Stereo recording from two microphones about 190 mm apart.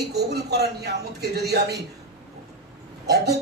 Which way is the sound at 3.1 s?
60° right (ahead or behind).